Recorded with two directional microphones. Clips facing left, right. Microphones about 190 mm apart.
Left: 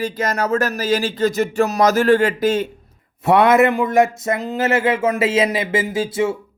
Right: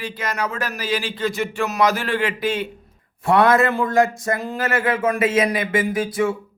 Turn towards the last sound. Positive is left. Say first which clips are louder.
# left 1 dB
turn(degrees=25)  # may be behind; listen again after turning